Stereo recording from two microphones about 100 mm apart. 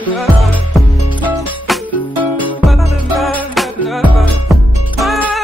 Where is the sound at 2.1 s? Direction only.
15° left (ahead or behind).